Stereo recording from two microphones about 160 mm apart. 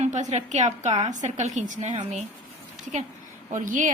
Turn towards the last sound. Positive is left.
turn(degrees=-55)  # may be behind; listen again after turning